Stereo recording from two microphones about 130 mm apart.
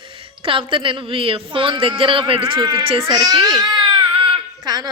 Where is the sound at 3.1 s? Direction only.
30° right (ahead or behind).